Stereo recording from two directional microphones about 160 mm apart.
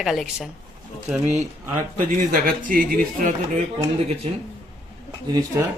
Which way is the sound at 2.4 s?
60° right (ahead or behind).